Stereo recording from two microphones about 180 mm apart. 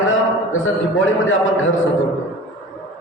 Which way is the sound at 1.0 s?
90° left.